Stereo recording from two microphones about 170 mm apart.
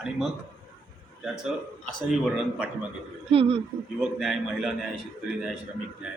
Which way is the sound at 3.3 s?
35° right (ahead or behind).